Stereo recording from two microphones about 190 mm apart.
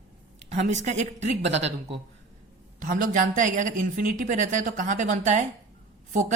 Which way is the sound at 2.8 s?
40° right (ahead or behind).